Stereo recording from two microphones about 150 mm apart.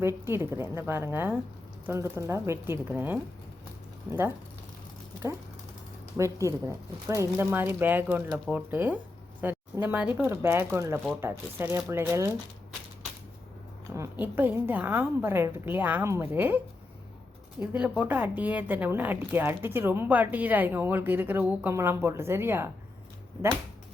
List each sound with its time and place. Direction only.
0.0 s speech: 15° right (ahead or behind)
6.1 s speech: 20° right (ahead or behind)
13.9 s speech: 15° right (ahead or behind)
17.6 s speech: 10° right (ahead or behind)